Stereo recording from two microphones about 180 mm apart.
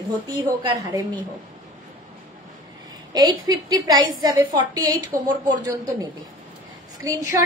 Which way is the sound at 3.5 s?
20° right (ahead or behind).